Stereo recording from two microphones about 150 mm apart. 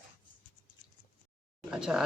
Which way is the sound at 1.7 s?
5° right (ahead or behind).